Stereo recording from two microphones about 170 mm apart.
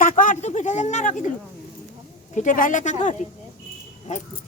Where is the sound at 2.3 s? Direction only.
50° left (ahead or behind).